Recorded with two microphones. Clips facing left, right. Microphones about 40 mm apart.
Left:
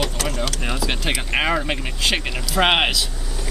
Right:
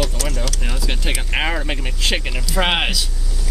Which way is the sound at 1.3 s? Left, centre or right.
Centre.